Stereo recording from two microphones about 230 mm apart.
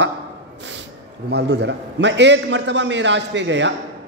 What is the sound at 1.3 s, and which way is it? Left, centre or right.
A man's voice, right.